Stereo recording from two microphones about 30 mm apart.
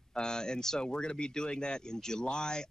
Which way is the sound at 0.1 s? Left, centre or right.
Left.